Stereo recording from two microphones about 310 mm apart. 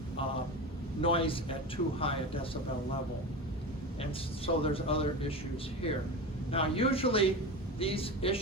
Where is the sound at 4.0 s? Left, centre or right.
Centre.